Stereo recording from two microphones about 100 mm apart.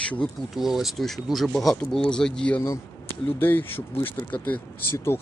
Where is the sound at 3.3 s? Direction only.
20° left (ahead or behind).